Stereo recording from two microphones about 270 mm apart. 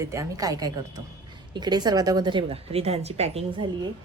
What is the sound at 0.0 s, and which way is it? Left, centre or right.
A woman's voice, centre.